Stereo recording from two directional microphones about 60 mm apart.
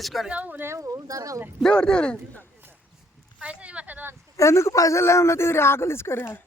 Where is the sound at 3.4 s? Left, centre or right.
Right.